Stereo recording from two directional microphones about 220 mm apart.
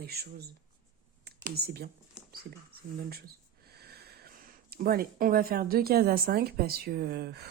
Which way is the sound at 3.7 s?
45° right (ahead or behind).